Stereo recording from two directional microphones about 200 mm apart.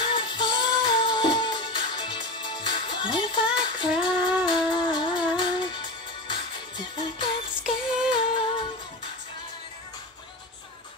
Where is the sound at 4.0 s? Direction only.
25° left (ahead or behind).